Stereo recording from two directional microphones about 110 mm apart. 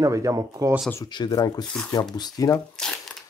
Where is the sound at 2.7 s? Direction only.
5° left (ahead or behind).